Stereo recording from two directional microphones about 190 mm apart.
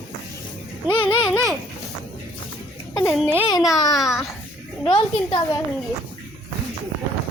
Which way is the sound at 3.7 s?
20° left (ahead or behind).